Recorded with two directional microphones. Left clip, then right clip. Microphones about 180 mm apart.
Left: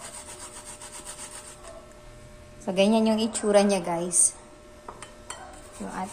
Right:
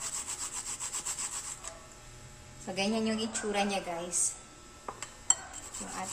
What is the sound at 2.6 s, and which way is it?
A woman's voice, 40° left (ahead or behind).